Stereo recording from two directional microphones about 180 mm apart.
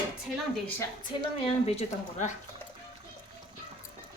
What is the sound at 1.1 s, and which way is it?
Speech, 30° left (ahead or behind).